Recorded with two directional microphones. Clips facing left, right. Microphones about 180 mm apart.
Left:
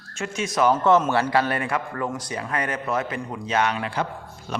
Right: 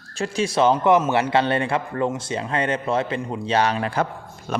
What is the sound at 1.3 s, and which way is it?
Speech, 25° right (ahead or behind).